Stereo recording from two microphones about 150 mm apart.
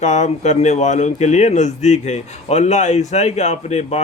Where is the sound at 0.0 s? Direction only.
50° left (ahead or behind).